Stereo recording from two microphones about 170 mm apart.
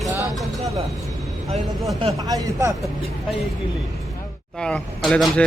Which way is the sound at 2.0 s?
20° right (ahead or behind).